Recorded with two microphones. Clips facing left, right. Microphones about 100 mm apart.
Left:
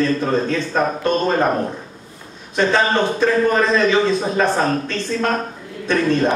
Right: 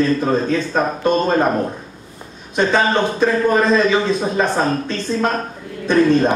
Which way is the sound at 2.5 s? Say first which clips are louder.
Right 1 dB; 15° right (ahead or behind).